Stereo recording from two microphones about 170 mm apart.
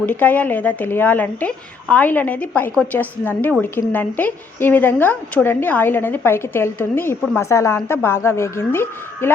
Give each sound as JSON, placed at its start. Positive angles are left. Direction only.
{"t": 0.0, "sound": "a woman's voice", "side_deg": 10}